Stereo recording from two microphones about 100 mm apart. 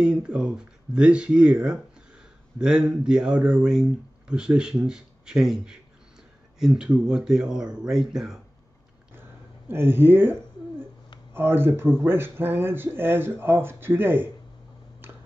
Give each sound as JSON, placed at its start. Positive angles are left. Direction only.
{"t": 0.0, "sound": "speech", "side_deg": -10}
{"t": 9.7, "sound": "speech", "side_deg": -20}